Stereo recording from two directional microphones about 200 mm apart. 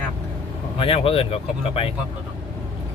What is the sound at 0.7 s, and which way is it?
Speech, 30° left (ahead or behind).